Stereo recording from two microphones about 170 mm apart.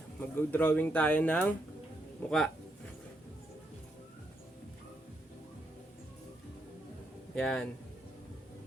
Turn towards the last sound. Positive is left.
turn(degrees=5)  # may be behind; listen again after turning